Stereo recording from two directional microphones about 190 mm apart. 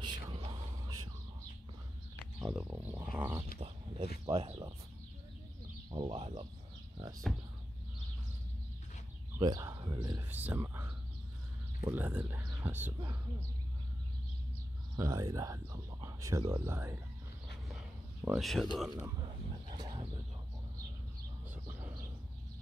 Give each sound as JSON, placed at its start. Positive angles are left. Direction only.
{"t": 0.0, "sound": "a sound", "side_deg": -25}
{"t": 2.4, "sound": "speech", "side_deg": -15}
{"t": 3.5, "sound": "speech", "side_deg": -30}
{"t": 5.9, "sound": "speech", "side_deg": -25}
{"t": 9.4, "sound": "speech", "side_deg": -20}
{"t": 10.3, "sound": "speech", "side_deg": -10}
{"t": 15.0, "sound": "speech", "side_deg": -20}
{"t": 18.2, "sound": "speech", "side_deg": 0}
{"t": 18.9, "sound": "speech", "side_deg": -15}
{"t": 19.7, "sound": "bird", "side_deg": -25}
{"t": 21.6, "sound": "a sound", "side_deg": -10}